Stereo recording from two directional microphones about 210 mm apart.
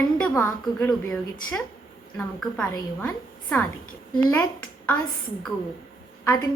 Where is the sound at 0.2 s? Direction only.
10° left (ahead or behind).